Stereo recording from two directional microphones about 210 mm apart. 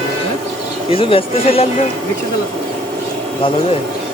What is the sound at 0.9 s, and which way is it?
Speech, 25° left (ahead or behind).